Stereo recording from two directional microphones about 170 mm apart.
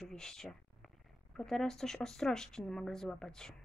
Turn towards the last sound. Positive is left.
turn(degrees=5)  # may be behind; listen again after turning